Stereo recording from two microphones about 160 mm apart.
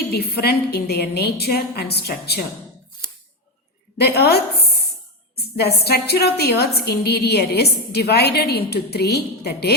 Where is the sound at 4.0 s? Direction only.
85° left.